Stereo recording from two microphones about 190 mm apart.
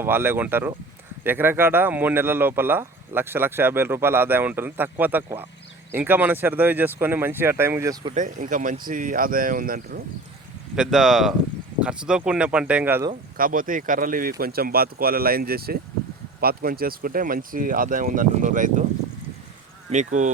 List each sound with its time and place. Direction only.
0.0 s speech: 10° right (ahead or behind)
8.1 s speech: 40° right (ahead or behind)
10.8 s speech: centre (ahead or behind)
13.3 s speech: 50° right (ahead or behind)
19.9 s speech: 40° right (ahead or behind)